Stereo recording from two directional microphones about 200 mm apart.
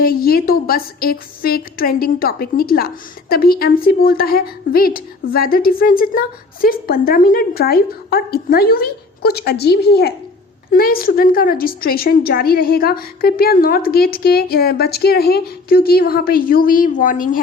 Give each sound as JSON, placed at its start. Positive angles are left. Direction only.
{"t": 0.0, "sound": "a woman's voice", "side_deg": 50}